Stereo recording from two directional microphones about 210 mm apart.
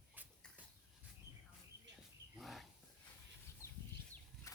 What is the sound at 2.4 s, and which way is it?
Wild animals, centre (ahead or behind).